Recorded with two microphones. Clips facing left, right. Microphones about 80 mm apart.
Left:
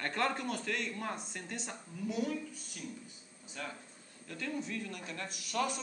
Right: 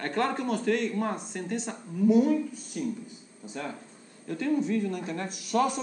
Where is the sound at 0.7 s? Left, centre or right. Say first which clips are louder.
Right 10 dB; right.